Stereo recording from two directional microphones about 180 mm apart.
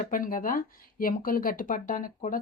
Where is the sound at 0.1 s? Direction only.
50° left (ahead or behind).